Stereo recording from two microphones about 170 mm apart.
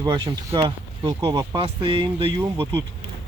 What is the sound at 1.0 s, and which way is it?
Speech, 20° right (ahead or behind).